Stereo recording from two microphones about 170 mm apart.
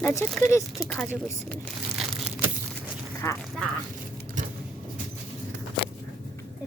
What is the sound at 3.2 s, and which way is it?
Speech, 15° left (ahead or behind).